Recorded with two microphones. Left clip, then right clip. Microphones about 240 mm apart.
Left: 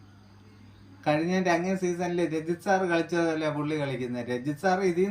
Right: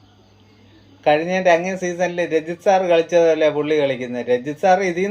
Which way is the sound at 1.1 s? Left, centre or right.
Left.